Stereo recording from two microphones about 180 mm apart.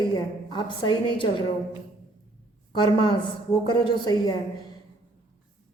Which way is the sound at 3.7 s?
25° left (ahead or behind).